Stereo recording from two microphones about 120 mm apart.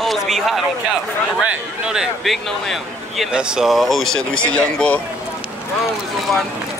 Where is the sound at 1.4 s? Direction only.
10° right (ahead or behind); by 5.0 s 10° left (ahead or behind).